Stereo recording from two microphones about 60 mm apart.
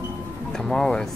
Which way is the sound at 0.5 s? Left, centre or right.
Centre.